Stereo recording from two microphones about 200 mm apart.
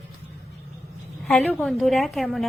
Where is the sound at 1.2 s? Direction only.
Centre (ahead or behind).